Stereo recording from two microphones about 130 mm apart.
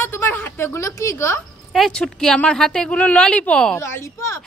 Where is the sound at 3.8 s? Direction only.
20° left (ahead or behind).